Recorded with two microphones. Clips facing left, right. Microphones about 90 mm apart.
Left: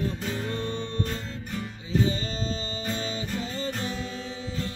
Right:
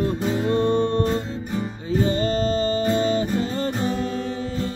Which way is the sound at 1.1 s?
20° right (ahead or behind).